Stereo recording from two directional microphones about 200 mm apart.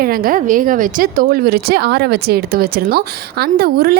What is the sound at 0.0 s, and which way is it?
A woman's voice, 45° right (ahead or behind).